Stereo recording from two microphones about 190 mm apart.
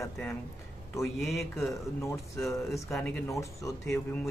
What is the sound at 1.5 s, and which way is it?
Speech, 15° left (ahead or behind).